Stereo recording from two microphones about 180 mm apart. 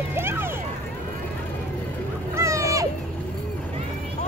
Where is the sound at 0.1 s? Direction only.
15° right (ahead or behind).